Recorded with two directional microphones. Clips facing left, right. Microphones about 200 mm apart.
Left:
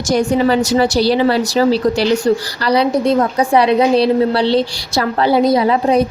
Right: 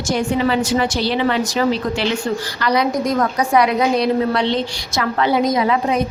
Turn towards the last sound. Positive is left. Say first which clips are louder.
# left 5 dB
turn(degrees=35)  # may be behind; listen again after turning